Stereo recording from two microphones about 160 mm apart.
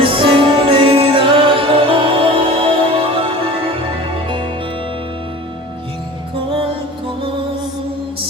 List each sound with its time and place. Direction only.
0.0 s music: 35° right (ahead or behind)